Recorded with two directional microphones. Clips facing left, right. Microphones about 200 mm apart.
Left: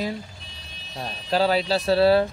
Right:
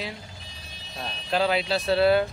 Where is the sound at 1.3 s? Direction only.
35° left (ahead or behind).